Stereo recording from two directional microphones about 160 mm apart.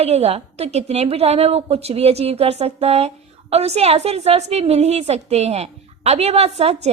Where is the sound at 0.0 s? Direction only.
40° right (ahead or behind).